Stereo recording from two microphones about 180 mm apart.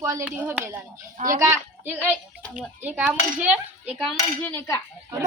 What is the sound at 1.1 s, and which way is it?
Speech, 45° right (ahead or behind).